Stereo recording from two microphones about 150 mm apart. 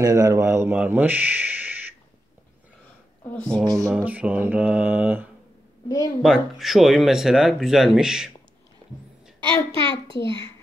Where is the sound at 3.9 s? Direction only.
10° right (ahead or behind).